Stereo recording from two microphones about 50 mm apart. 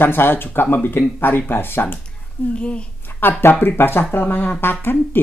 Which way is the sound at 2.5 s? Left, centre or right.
Left.